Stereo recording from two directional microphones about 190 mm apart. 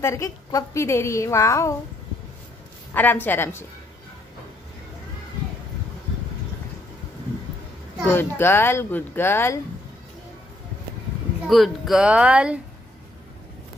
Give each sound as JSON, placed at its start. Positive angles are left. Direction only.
{"t": 0.0, "sound": "a woman's voice", "side_deg": 15}
{"t": 2.9, "sound": "a woman's voice", "side_deg": 10}
{"t": 8.0, "sound": "a woman's voice", "side_deg": 10}
{"t": 11.4, "sound": "speech", "side_deg": 0}